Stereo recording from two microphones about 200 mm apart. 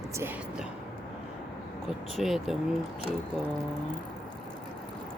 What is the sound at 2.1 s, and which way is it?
Speech, centre (ahead or behind).